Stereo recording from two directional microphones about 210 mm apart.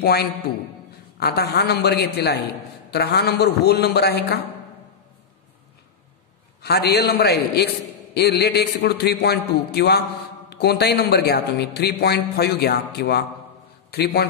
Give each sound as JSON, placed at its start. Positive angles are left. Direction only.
{"t": 0.0, "sound": "a man's voice", "side_deg": 50}
{"t": 6.6, "sound": "a man's voice", "side_deg": 50}